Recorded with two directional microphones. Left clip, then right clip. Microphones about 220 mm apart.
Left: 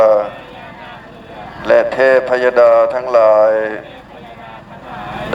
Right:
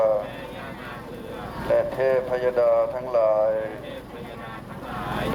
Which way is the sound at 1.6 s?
45° left (ahead or behind).